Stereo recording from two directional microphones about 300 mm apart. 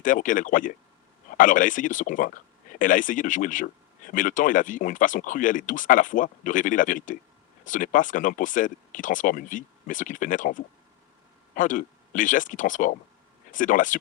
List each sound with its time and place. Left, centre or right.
0.0 s speech: left